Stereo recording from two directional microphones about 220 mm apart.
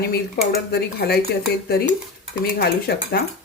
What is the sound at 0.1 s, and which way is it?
Speech, 45° left (ahead or behind).